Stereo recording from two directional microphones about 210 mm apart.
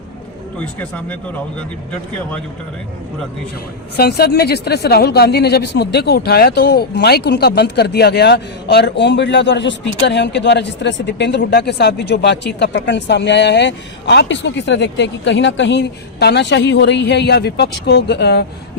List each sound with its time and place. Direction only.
0.6 s speech: 5° left (ahead or behind)
3.9 s speech: 50° left (ahead or behind)